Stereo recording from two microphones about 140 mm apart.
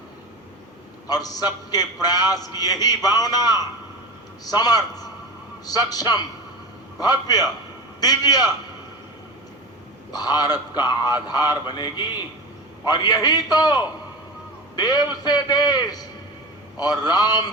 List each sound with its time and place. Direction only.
1.0 s a man's voice: 25° left (ahead or behind)
10.1 s a man's voice: 30° left (ahead or behind)
14.8 s a man's voice: 30° left (ahead or behind)